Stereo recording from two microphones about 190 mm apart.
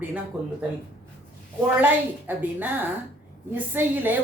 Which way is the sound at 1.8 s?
10° right (ahead or behind).